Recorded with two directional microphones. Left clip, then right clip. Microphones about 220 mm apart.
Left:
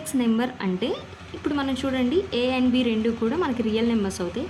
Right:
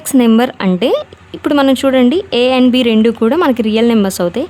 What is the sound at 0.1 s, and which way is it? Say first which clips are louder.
Speech: right 14 dB; 50° right (ahead or behind).